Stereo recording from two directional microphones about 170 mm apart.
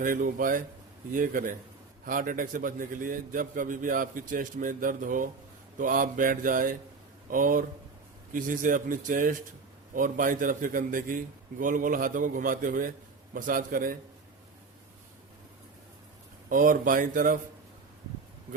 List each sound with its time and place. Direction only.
0.0 s a man's voice: 55° right (ahead or behind)
16.5 s a man's voice: 55° right (ahead or behind)